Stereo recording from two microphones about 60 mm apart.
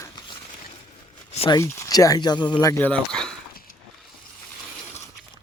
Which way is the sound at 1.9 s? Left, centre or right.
Left.